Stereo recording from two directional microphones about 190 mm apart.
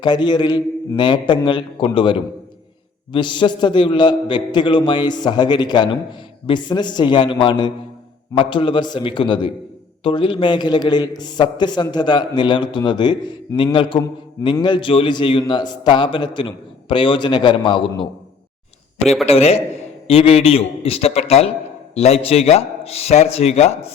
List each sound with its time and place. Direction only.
0.0 s a man's voice: 25° left (ahead or behind)
19.2 s a man's voice: 35° left (ahead or behind)